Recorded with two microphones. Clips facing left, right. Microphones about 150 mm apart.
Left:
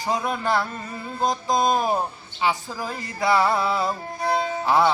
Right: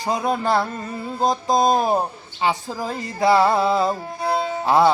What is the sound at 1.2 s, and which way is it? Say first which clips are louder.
Speech: right 3 dB; 30° right (ahead or behind).